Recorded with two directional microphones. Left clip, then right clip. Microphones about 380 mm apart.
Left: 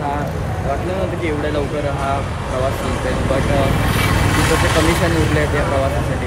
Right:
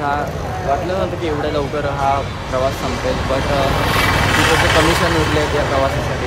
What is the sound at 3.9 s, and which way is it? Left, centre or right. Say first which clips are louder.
Vehicle: right 3 dB; right.